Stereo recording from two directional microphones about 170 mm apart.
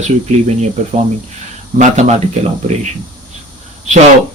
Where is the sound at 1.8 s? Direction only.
40° right (ahead or behind).